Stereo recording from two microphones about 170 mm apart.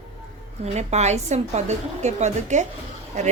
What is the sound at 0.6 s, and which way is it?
A woman's voice, 40° right (ahead or behind).